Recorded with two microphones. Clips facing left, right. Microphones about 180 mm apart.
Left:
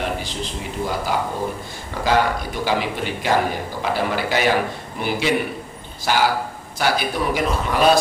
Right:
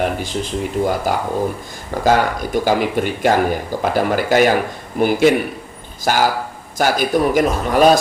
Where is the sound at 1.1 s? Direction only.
45° right (ahead or behind).